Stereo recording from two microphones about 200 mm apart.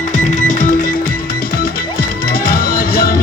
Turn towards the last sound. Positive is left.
turn(degrees=50)  # may be behind; listen again after turning